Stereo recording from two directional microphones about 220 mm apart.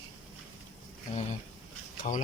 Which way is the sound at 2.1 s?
35° left (ahead or behind).